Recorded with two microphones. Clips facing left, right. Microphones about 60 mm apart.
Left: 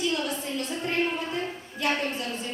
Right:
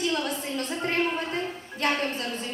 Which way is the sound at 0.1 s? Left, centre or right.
Right.